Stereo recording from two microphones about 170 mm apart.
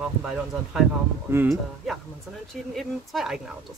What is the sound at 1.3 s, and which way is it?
Speech, 15° right (ahead or behind).